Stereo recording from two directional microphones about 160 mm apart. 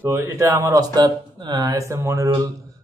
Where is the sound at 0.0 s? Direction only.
15° right (ahead or behind).